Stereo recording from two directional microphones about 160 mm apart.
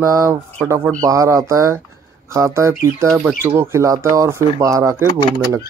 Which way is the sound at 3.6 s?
15° right (ahead or behind).